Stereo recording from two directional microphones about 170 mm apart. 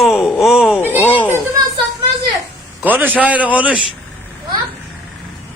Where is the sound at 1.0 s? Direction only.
10° left (ahead or behind).